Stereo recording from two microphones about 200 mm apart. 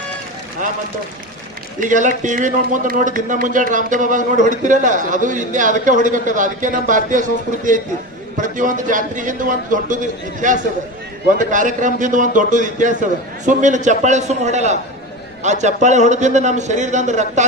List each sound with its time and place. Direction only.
1.8 s speech: 40° right (ahead or behind)